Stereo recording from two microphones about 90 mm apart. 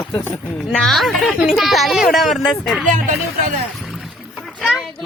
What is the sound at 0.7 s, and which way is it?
Speech, 5° left (ahead or behind).